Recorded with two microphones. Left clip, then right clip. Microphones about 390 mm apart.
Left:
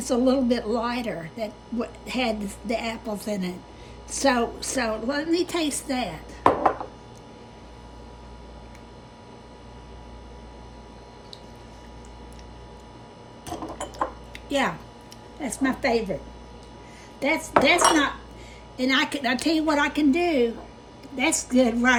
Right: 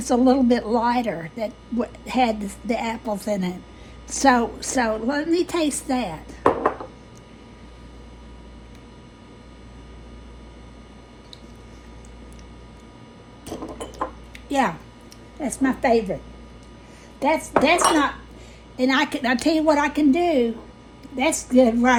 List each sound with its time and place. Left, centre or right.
0.0 s a woman's voice: centre
15.4 s a woman's voice: centre
17.2 s a woman's voice: centre